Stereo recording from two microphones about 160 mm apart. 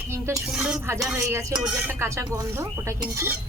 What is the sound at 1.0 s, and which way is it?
Speech, 15° right (ahead or behind).